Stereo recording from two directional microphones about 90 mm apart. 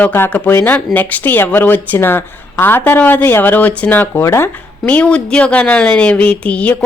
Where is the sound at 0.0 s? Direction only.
20° left (ahead or behind).